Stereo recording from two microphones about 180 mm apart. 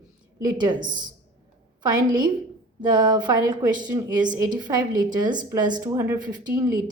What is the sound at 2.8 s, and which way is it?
A woman's voice, 25° right (ahead or behind).